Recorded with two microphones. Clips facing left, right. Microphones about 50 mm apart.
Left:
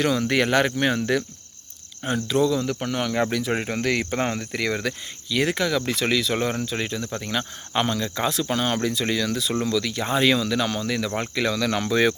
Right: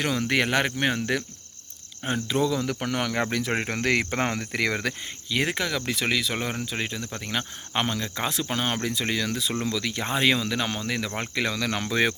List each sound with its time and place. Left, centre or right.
0.0 s speech: centre
2.2 s cricket: right
2.6 s speech: right
3.2 s cricket: right
3.6 s speech: right
5.3 s speech: centre